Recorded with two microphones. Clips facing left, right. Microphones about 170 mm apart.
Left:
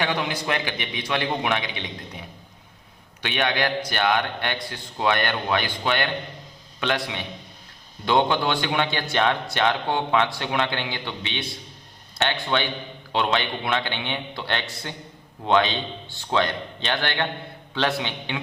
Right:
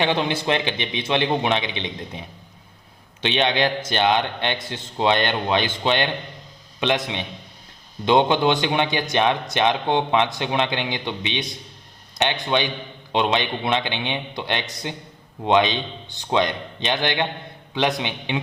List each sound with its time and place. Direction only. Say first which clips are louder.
0.0 s a man's voice: right 4 dB; 25° right (ahead or behind)